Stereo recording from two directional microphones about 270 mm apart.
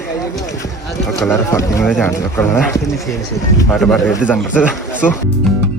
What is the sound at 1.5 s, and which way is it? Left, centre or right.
Speech, centre.